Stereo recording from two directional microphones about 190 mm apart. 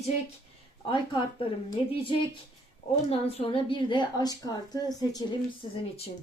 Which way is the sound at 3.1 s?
30° left (ahead or behind).